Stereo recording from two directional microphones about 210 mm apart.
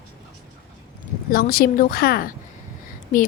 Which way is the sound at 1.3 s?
45° left (ahead or behind).